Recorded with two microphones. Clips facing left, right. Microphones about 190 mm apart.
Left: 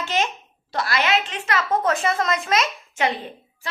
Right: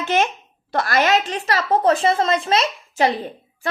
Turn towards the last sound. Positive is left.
turn(degrees=-30)  # may be behind; listen again after turning